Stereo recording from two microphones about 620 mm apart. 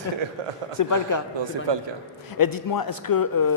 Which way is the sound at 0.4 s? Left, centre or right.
Right.